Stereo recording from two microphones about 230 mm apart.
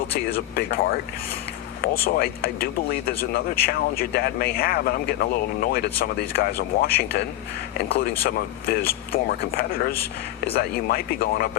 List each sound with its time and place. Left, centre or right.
0.3 s speech: left